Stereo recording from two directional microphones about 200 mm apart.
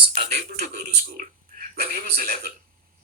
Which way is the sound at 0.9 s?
45° right (ahead or behind).